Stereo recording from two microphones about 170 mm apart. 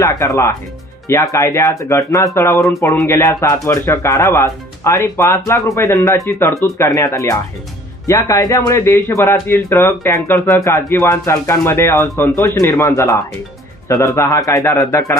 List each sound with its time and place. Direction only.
0.0 s speech: 15° left (ahead or behind)